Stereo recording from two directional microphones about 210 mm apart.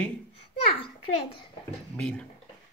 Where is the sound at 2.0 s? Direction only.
5° left (ahead or behind).